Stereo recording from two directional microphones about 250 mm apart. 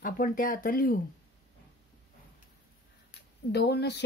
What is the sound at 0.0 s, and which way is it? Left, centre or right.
Speech, left.